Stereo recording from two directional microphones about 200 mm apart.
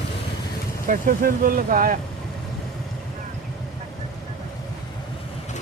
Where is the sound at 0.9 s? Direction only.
45° right (ahead or behind).